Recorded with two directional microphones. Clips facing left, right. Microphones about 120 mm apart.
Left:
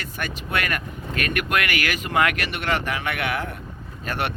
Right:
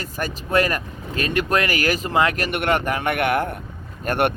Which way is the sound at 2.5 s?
50° right (ahead or behind).